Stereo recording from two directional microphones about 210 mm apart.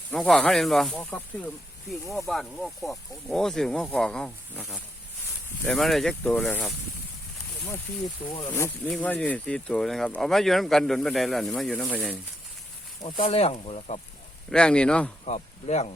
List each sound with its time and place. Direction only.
0.1 s speech: 5° left (ahead or behind)
8.3 s speech: 20° left (ahead or behind)
13.0 s speech: 25° left (ahead or behind)
14.5 s speech: 5° left (ahead or behind)
15.2 s speech: 30° left (ahead or behind)